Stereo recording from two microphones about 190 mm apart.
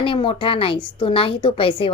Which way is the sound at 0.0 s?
25° left (ahead or behind).